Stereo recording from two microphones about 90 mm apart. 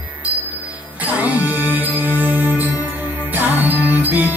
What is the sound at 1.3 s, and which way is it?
Music, 15° right (ahead or behind).